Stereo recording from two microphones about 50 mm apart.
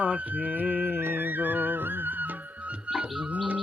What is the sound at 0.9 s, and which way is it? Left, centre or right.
Music, right.